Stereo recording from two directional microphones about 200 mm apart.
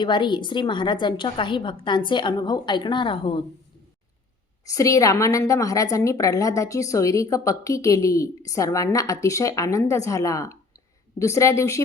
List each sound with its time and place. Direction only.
0.0 s a woman's voice: 25° left (ahead or behind)
4.6 s a woman's voice: 15° left (ahead or behind)